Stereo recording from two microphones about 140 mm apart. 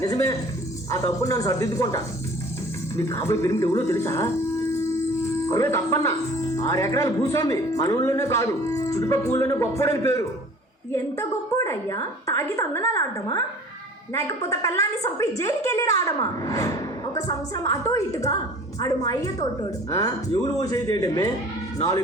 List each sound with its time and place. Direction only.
0.0 s speech: 25° left (ahead or behind)
5.5 s speech: 20° left (ahead or behind)
14.1 s speech: 20° left (ahead or behind)